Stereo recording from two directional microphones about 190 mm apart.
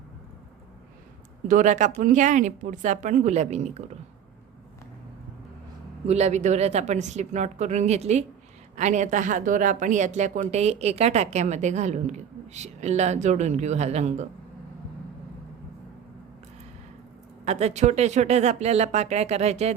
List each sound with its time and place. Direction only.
1.5 s a woman's voice: 40° right (ahead or behind)
6.1 s a woman's voice: 35° right (ahead or behind)
17.4 s a woman's voice: 35° right (ahead or behind)